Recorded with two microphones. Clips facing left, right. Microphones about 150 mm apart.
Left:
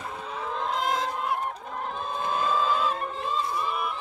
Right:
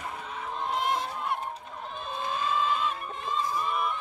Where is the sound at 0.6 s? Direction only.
90° left.